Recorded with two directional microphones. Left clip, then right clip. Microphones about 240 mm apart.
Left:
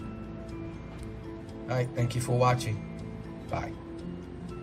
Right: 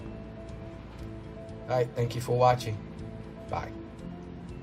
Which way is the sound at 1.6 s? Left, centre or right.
Centre.